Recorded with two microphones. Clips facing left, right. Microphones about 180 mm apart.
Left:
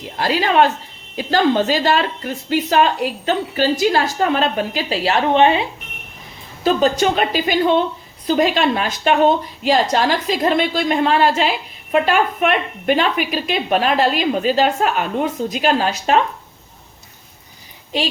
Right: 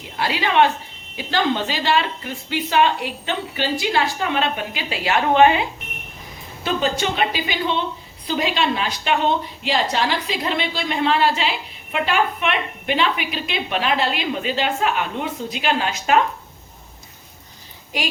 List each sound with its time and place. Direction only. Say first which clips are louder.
0.2 s a woman's voice: left 3 dB; 40° left (ahead or behind); by 5.6 s 25° left (ahead or behind)
6.7 s a woman's voice: left 6 dB; 40° left (ahead or behind)
17.9 s a woman's voice: left 5 dB; 25° left (ahead or behind)